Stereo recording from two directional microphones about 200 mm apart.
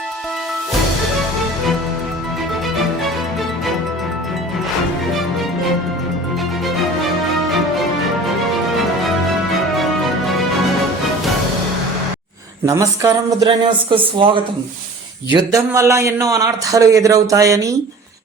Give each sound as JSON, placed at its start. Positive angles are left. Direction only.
{"t": 9.5, "sound": "music", "side_deg": 0}
{"t": 12.6, "sound": "a man's voice", "side_deg": -15}